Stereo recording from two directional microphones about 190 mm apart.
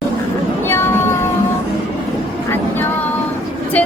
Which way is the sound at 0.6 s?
15° left (ahead or behind).